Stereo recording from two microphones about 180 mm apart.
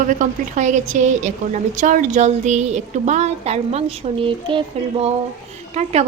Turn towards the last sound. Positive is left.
turn(degrees=-35)  # may be behind; listen again after turning